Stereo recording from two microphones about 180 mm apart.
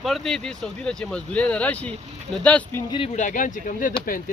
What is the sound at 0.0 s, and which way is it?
Speech, centre (ahead or behind).